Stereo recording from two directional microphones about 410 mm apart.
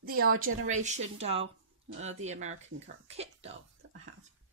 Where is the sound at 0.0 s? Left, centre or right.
Right.